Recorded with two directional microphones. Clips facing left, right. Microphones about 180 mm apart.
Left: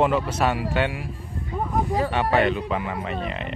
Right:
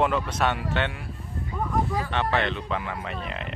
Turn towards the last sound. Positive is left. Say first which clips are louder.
# left 4 dB
turn(degrees=0)  # may be behind; listen again after turning